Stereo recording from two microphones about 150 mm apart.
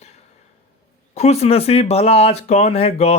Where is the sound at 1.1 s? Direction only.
45° left (ahead or behind).